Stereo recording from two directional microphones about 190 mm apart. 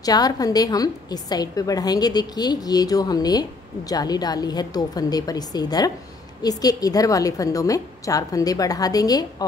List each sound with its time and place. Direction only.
0.0 s a woman's voice: 20° left (ahead or behind)